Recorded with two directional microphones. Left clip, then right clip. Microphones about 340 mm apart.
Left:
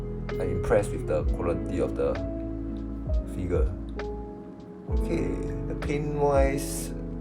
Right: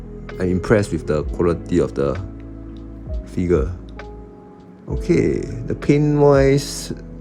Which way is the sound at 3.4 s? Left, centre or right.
Right.